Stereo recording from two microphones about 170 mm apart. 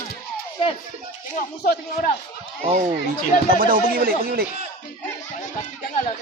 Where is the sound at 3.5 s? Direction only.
55° right (ahead or behind).